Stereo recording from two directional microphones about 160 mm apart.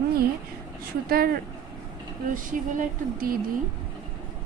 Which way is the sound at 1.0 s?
70° right (ahead or behind).